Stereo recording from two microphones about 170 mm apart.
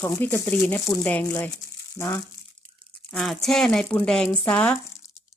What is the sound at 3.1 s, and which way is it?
A woman's voice, centre (ahead or behind).